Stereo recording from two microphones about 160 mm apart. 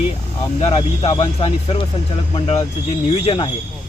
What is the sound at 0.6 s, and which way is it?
Speech, 35° left (ahead or behind).